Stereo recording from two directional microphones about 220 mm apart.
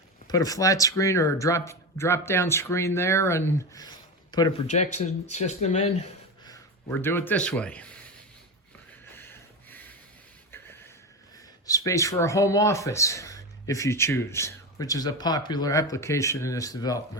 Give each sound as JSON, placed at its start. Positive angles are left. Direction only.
{"t": 0.3, "sound": "speech", "side_deg": 15}
{"t": 4.6, "sound": "speech", "side_deg": 30}
{"t": 6.5, "sound": "speech", "side_deg": 10}
{"t": 9.1, "sound": "a sound", "side_deg": 10}
{"t": 11.6, "sound": "speech", "side_deg": 15}